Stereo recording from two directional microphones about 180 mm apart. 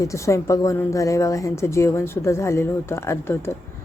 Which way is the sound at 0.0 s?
15° left (ahead or behind).